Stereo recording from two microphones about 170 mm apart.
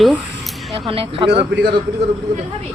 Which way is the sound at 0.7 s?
35° right (ahead or behind).